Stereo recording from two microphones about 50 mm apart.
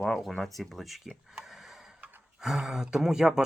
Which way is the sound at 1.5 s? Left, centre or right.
Centre.